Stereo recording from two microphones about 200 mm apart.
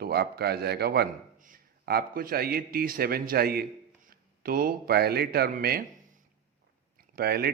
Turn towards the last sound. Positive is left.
turn(degrees=-50)  # may be behind; listen again after turning